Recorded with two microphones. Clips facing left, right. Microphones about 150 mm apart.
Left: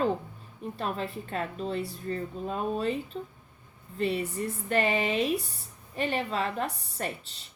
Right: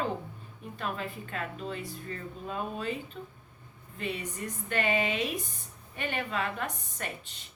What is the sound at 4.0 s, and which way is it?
A woman's voice, 35° left (ahead or behind).